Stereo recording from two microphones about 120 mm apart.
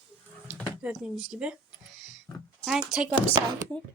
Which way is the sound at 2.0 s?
Centre (ahead or behind).